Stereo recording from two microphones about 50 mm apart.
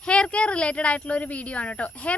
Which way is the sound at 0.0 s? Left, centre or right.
Left.